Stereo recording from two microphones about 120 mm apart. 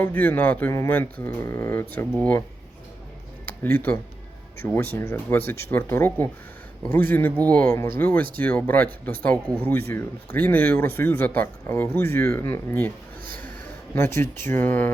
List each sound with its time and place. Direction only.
0.0 s speech: 15° left (ahead or behind)
3.6 s speech: 15° left (ahead or behind)
13.9 s speech: 20° left (ahead or behind)